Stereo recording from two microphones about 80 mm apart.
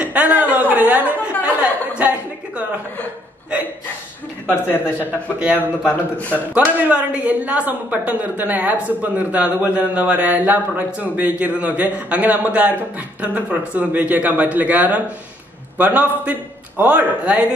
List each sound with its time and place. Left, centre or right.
0.0 s a woman's voice: centre
4.5 s a man's voice: left
4.9 s a woman's voice: centre
5.9 s a man's voice: left
6.5 s a woman's voice: centre